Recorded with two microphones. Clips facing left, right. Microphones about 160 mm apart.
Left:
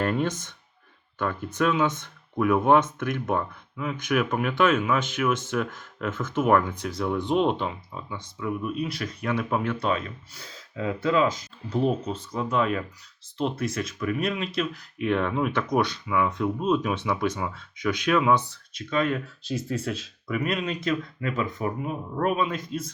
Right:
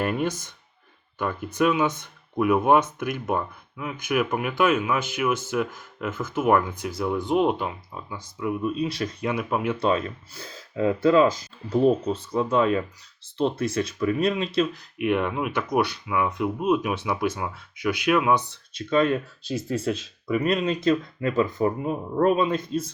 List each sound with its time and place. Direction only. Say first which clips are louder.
0.0 s speech: even; 10° right (ahead or behind)
8.6 s speech: right 3 dB; 25° right (ahead or behind)
9.3 s speech: left 1 dB; 5° right (ahead or behind)
10.8 s speech: right 5 dB; 35° right (ahead or behind)
14.9 s speech: right 1 dB; 15° right (ahead or behind)
18.7 s speech: right 4 dB; 30° right (ahead or behind)
19.7 s speech: right 5 dB; centre (ahead or behind)
20.3 s speech: right 4 dB; 35° right (ahead or behind)